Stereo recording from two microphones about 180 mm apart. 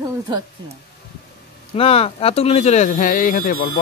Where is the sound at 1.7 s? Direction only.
35° left (ahead or behind); by 3.8 s 55° left (ahead or behind).